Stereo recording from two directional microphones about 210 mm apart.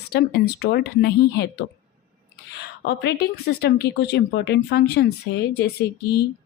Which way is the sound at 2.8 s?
50° left (ahead or behind).